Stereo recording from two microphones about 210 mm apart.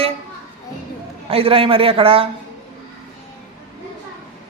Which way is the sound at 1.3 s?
25° right (ahead or behind).